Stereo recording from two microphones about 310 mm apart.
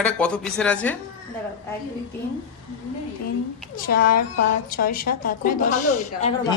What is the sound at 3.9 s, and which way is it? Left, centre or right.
A woman's voice, left.